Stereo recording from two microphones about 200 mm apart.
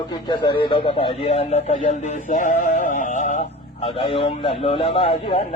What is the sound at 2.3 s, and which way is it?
Synthetic singing, 40° left (ahead or behind).